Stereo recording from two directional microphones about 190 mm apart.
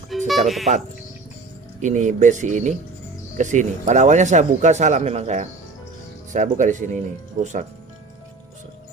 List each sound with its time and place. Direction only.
0.3 s speech: centre (ahead or behind)
1.8 s speech: 40° right (ahead or behind)